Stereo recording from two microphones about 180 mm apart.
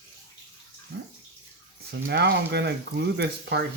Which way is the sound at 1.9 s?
70° right (ahead or behind).